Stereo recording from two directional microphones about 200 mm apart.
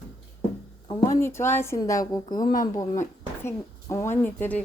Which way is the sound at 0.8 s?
15° left (ahead or behind).